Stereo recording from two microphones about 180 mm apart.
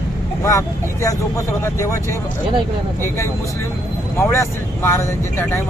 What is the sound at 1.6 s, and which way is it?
Speech, 15° left (ahead or behind).